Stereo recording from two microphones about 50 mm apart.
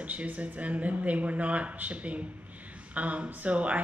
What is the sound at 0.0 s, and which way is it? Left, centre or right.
Speech, right.